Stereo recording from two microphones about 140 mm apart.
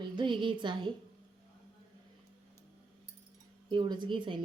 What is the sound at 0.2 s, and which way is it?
Speech, 35° right (ahead or behind).